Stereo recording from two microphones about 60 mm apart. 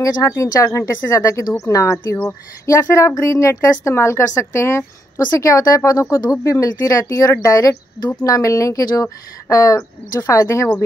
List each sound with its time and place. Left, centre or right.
0.4 s speech: left
6.1 s speech: left
7.4 s speech: left
10.3 s speech: left